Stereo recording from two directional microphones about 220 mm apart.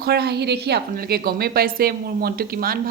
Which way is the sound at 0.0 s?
45° right (ahead or behind).